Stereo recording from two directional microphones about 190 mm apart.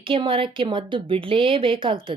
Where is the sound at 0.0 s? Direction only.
25° right (ahead or behind).